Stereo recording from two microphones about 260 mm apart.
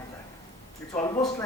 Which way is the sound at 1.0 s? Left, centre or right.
Centre.